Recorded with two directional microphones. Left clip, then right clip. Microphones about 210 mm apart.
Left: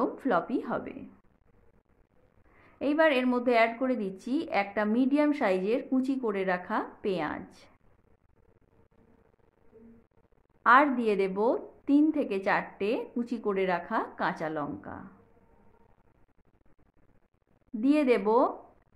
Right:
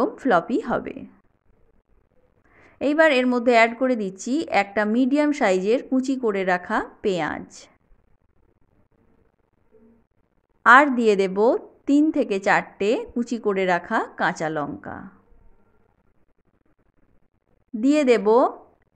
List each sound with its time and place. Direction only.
0.0 s a woman's voice: 30° right (ahead or behind)
2.5 s a woman's voice: 30° right (ahead or behind)
10.6 s a woman's voice: 30° right (ahead or behind)
17.7 s a woman's voice: 30° right (ahead or behind)